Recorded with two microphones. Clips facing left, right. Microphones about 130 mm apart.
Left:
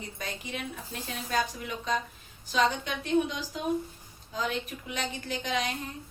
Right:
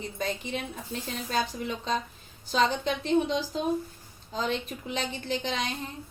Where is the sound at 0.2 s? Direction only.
30° right (ahead or behind).